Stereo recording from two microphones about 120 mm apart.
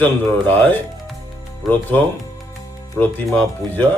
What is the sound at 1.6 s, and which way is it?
Speech, centre (ahead or behind).